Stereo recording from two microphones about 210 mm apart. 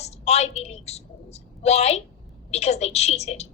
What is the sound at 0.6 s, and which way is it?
A woman's voice, 30° left (ahead or behind).